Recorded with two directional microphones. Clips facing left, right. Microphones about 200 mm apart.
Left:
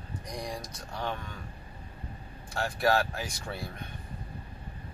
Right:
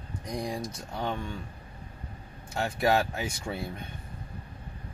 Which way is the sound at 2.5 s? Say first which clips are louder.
Right 1 dB; 20° right (ahead or behind).